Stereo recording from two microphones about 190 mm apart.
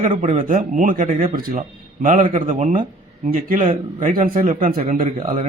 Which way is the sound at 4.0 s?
40° right (ahead or behind).